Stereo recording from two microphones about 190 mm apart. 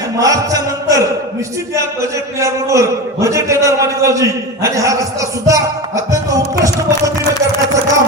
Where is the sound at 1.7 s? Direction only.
15° right (ahead or behind).